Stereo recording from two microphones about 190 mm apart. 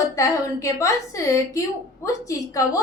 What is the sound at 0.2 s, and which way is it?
A woman's voice, 15° left (ahead or behind).